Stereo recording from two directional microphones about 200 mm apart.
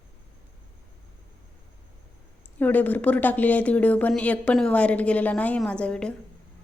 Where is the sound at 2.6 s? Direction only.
10° left (ahead or behind).